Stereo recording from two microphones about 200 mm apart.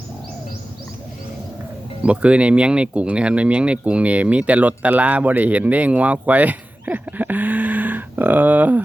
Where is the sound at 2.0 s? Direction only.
5° right (ahead or behind).